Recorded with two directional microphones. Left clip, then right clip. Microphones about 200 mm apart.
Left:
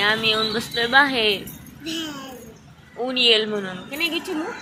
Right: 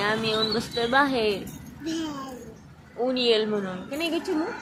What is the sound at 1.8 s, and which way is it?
Speech, 15° right (ahead or behind).